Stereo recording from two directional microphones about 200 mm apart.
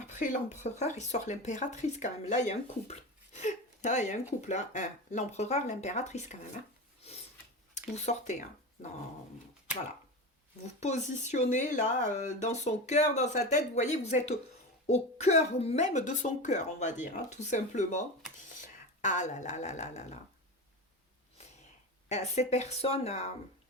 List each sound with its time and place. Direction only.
0.0 s speech: 40° left (ahead or behind)
7.9 s speech: 35° left (ahead or behind)
10.8 s speech: 35° left (ahead or behind)
22.1 s speech: 35° left (ahead or behind)